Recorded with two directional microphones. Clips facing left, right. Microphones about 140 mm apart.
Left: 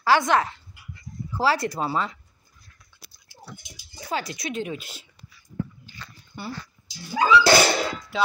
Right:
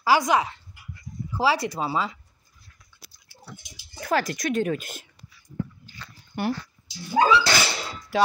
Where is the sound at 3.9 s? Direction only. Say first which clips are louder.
Right 5 dB; 55° right (ahead or behind).